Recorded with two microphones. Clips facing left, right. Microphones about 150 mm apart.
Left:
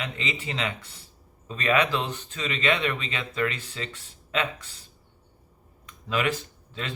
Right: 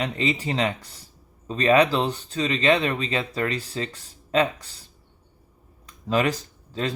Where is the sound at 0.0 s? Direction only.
35° right (ahead or behind).